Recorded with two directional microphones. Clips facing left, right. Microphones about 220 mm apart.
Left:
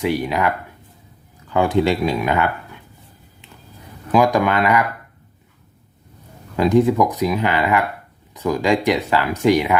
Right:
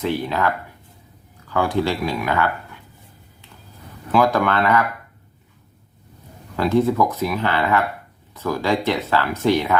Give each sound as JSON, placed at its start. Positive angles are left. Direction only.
{"t": 0.0, "sound": "speech", "side_deg": 15}
{"t": 1.5, "sound": "speech", "side_deg": 20}
{"t": 4.1, "sound": "speech", "side_deg": 15}
{"t": 6.6, "sound": "speech", "side_deg": 15}